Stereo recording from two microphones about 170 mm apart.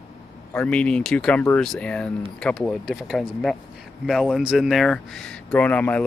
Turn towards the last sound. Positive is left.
turn(degrees=10)  # may be behind; listen again after turning